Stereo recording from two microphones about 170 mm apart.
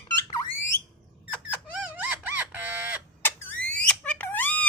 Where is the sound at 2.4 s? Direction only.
10° right (ahead or behind).